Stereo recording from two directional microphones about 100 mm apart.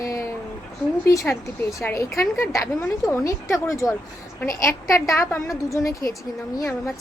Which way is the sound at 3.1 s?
30° left (ahead or behind).